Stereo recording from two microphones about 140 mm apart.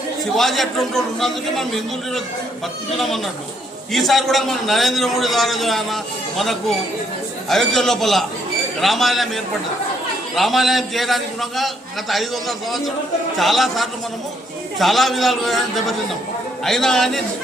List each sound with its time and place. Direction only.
0.3 s a man's voice: centre (ahead or behind)
3.9 s a man's voice: centre (ahead or behind)